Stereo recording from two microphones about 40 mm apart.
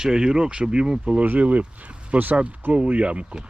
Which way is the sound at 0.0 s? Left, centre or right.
Centre.